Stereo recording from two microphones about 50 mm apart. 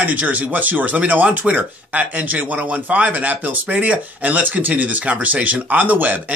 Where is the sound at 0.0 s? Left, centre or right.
Right.